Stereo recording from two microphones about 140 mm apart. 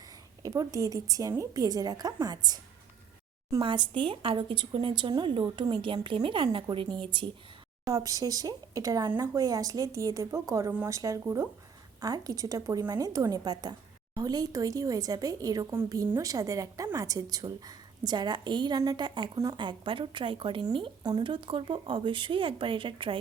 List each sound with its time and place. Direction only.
0.4 s speech: 25° right (ahead or behind)
3.6 s a woman's voice: 35° right (ahead or behind)
7.9 s a woman's voice: 25° right (ahead or behind)